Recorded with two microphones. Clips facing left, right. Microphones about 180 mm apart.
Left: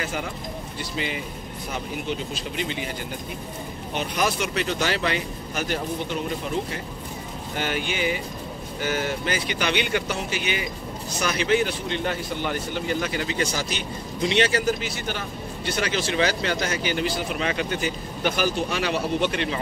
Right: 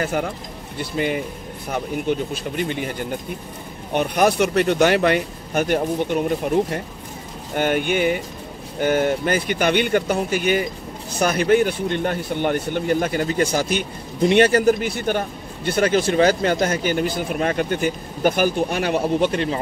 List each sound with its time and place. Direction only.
0.0 s speech: 50° right (ahead or behind)
3.9 s speech: 55° right (ahead or behind); by 19.6 s 35° right (ahead or behind)